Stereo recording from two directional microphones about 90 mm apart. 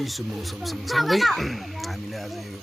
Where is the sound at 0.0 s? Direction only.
Centre (ahead or behind).